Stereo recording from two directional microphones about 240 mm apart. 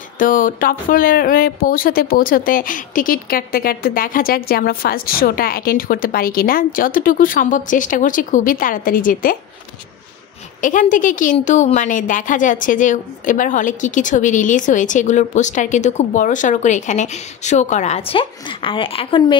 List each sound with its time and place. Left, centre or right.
0.2 s speech: left
10.6 s speech: left